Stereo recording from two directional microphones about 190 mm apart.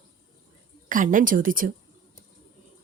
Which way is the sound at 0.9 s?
45° right (ahead or behind).